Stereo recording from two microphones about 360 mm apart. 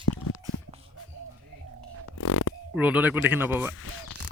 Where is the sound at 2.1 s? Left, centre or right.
Left.